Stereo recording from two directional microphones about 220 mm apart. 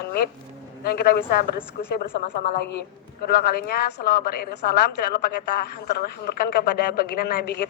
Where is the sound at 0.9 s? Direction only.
45° left (ahead or behind).